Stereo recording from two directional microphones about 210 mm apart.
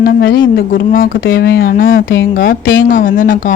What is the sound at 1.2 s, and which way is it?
Speech, 60° left (ahead or behind).